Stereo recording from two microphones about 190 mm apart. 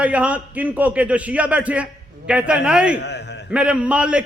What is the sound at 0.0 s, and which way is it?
A man's voice, 5° right (ahead or behind).